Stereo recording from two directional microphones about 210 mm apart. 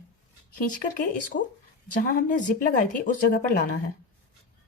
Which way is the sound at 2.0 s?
40° left (ahead or behind).